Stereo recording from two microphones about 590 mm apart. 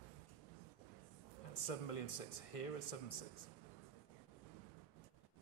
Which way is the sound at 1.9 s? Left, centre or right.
Left.